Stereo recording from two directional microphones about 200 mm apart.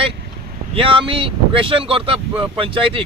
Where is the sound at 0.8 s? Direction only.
25° right (ahead or behind).